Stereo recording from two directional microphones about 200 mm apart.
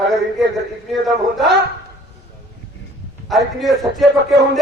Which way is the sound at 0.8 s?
Centre (ahead or behind).